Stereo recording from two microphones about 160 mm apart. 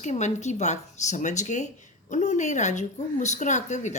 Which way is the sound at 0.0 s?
45° left (ahead or behind).